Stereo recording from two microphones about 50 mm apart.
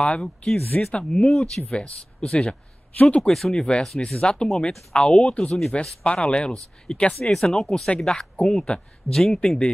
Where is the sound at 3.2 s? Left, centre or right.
Centre.